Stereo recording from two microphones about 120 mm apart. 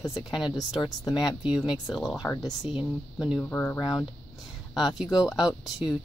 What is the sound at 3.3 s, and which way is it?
Speech, 15° left (ahead or behind).